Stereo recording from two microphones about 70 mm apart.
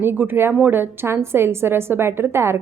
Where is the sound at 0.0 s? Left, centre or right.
Right.